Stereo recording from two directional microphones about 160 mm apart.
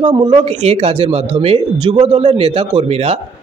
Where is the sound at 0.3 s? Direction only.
40° right (ahead or behind).